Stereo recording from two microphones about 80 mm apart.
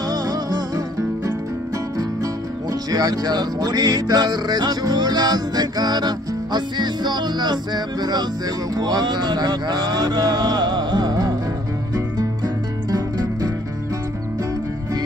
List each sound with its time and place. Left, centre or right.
0.1 s music: right
2.9 s music: right
8.7 s speech: right
12.9 s music: right